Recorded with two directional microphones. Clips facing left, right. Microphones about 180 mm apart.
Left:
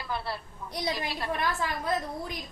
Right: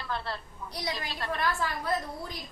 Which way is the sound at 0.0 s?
10° left (ahead or behind).